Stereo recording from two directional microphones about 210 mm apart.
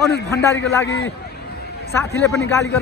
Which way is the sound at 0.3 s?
15° left (ahead or behind).